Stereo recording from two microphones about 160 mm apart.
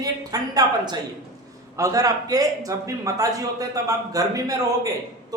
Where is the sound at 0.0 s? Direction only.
25° right (ahead or behind).